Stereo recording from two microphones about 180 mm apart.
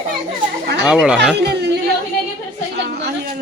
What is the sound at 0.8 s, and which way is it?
Speech, 5° right (ahead or behind).